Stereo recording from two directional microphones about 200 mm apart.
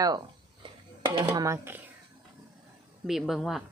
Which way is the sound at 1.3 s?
15° right (ahead or behind).